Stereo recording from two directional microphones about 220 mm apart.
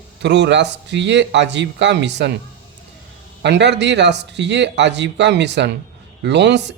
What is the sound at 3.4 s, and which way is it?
Speech, 50° right (ahead or behind).